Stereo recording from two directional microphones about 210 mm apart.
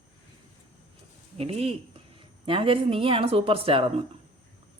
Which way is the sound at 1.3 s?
25° right (ahead or behind).